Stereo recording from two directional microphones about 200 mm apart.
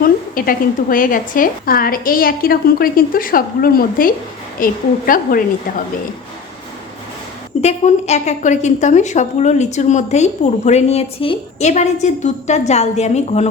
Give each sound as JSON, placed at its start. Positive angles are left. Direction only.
{"t": 0.0, "sound": "a woman's voice", "side_deg": 45}
{"t": 7.6, "sound": "a woman's voice", "side_deg": 35}